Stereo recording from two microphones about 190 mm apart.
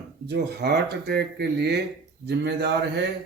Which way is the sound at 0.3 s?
60° right (ahead or behind).